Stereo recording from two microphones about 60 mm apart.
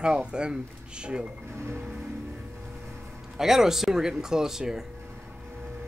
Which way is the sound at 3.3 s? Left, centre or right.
Centre.